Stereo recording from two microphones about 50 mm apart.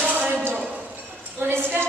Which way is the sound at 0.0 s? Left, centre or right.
Right.